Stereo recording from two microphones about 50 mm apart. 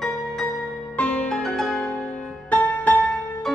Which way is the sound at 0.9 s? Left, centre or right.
Left.